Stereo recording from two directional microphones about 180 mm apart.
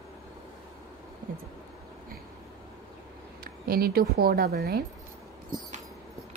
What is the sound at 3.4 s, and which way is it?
Speech, 55° right (ahead or behind).